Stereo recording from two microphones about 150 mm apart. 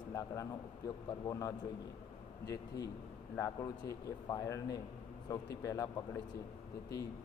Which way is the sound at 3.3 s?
25° left (ahead or behind).